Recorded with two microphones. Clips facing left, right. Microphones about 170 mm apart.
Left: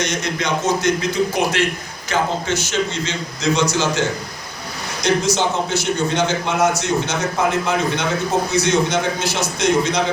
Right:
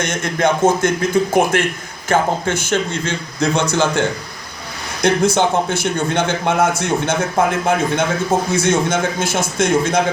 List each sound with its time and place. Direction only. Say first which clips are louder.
0.0 s a man's voice: right 4 dB; 50° right (ahead or behind)